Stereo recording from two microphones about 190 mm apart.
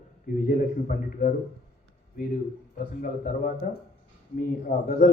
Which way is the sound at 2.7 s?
45° left (ahead or behind).